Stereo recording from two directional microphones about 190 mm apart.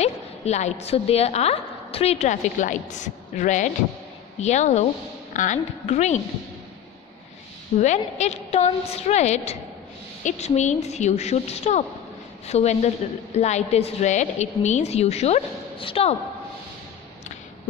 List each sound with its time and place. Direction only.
0.0 s a woman's voice: 35° left (ahead or behind)
7.8 s a woman's voice: 35° left (ahead or behind)